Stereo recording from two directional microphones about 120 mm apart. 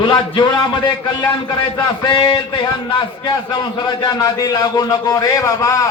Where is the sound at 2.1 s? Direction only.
45° left (ahead or behind).